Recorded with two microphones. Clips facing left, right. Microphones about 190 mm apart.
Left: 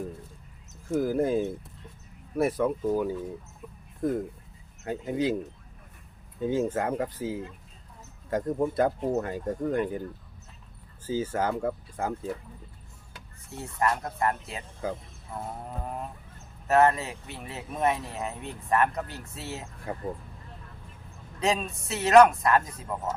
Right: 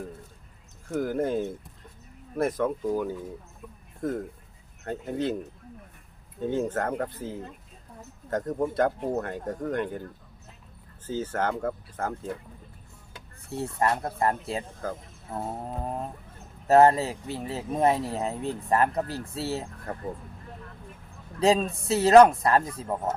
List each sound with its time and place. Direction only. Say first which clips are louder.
0.9 s speech: left 2 dB; 5° left (ahead or behind)
6.4 s speech: left 1 dB; 5° left (ahead or behind)
11.0 s speech: left 1 dB; 10° left (ahead or behind)
13.5 s speech: right 2 dB; 35° right (ahead or behind)
14.8 s speech: left 4 dB; 10° left (ahead or behind)
15.3 s speech: right 4 dB; 25° right (ahead or behind)
19.9 s speech: left 2 dB; 10° left (ahead or behind)
21.4 s speech: right 5 dB; 35° right (ahead or behind)